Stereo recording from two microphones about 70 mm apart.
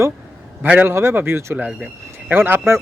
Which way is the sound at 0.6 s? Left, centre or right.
Right.